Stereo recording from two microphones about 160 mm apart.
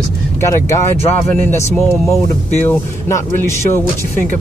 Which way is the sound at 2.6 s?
15° left (ahead or behind).